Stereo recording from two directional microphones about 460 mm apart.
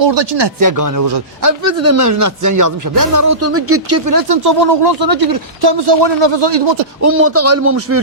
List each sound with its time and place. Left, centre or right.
0.0 s speech: right
0.6 s speech: right
7.0 s a man's voice: right